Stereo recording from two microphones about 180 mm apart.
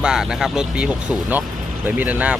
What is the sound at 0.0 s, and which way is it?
Speech, 5° right (ahead or behind).